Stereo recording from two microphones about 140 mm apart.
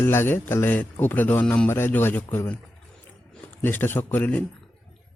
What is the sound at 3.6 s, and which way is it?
Speech, 15° left (ahead or behind).